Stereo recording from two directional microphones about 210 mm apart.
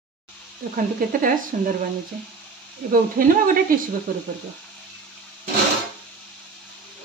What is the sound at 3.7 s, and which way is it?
Speech, 40° right (ahead or behind).